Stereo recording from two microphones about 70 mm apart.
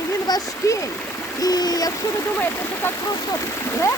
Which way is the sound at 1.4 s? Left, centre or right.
Left.